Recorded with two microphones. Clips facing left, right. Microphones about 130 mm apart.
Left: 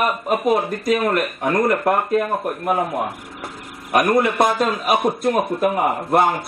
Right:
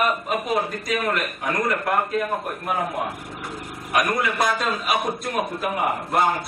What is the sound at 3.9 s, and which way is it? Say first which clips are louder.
A man's voice: left 6 dB; 35° left (ahead or behind).